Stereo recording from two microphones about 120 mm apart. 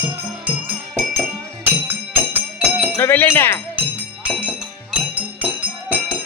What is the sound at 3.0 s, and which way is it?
Speech, 20° left (ahead or behind).